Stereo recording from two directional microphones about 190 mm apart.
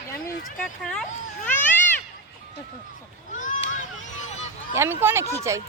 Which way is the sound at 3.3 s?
40° left (ahead or behind).